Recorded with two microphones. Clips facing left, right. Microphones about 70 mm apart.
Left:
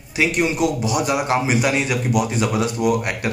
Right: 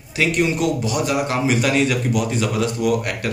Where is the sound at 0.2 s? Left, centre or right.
Centre.